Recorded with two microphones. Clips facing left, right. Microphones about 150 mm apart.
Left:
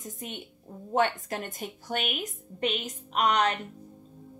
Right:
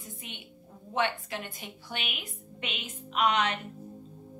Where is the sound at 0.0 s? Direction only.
45° left (ahead or behind).